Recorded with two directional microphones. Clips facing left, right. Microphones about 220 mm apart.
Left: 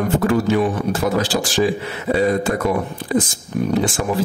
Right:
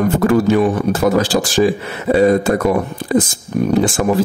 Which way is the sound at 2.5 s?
40° right (ahead or behind).